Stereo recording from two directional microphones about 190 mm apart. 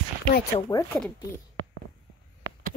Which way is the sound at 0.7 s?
25° left (ahead or behind).